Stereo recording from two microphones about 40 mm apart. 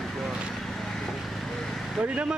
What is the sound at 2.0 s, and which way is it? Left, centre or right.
Speech, right.